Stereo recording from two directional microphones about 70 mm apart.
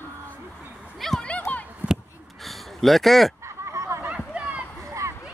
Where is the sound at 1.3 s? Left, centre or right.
Left.